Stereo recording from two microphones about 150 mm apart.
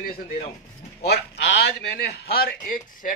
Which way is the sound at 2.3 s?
80° left.